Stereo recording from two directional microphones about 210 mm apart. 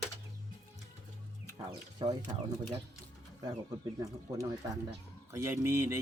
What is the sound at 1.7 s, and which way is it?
Speech, 20° right (ahead or behind).